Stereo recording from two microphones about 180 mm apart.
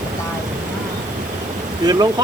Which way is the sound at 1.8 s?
20° right (ahead or behind).